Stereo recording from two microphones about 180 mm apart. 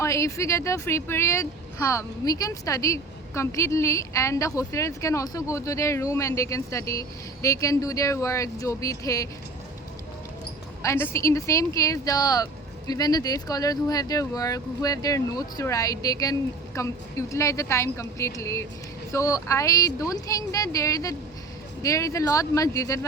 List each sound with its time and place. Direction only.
0.0 s speech: 15° left (ahead or behind)
10.8 s speech: 15° left (ahead or behind)